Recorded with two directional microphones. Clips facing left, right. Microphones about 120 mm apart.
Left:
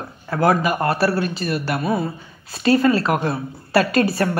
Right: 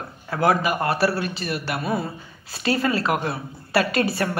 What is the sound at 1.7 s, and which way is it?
Speech, 25° left (ahead or behind).